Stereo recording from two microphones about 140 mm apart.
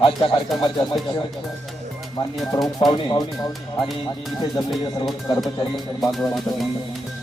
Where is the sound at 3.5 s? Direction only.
Centre (ahead or behind).